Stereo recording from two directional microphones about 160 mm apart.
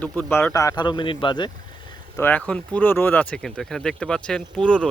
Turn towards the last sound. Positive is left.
turn(degrees=5)  # may be behind; listen again after turning